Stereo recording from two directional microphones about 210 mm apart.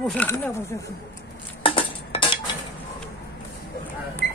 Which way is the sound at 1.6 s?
25° left (ahead or behind).